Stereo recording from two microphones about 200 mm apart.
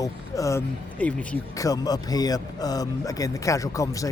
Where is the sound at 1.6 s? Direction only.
20° left (ahead or behind).